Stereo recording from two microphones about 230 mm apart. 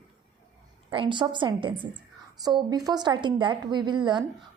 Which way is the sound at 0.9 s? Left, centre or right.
Right.